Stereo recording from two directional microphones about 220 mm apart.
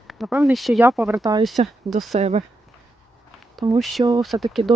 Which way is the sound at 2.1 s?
30° right (ahead or behind).